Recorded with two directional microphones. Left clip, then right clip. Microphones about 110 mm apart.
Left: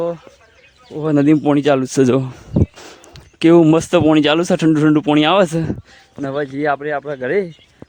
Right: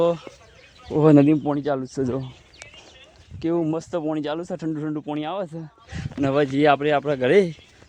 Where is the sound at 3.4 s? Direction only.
90° left.